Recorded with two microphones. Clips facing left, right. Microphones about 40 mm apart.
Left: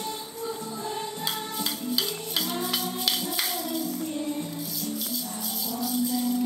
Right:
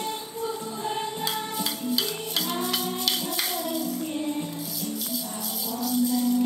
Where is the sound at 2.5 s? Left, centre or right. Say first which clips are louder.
Right 3 dB; centre.